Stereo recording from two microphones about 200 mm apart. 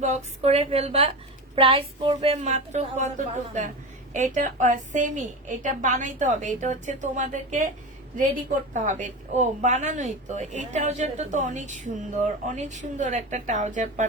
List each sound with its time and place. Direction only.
0.0 s a woman's voice: 35° right (ahead or behind)
8.7 s a woman's voice: 40° right (ahead or behind)